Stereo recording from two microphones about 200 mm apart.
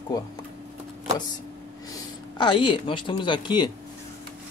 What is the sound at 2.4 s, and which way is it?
Speech, 25° left (ahead or behind).